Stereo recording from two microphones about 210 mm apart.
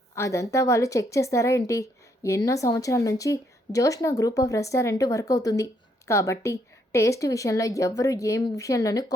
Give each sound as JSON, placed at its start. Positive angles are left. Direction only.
{"t": 0.2, "sound": "a woman's voice", "side_deg": 15}